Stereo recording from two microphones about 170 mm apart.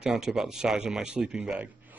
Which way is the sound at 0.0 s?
5° right (ahead or behind).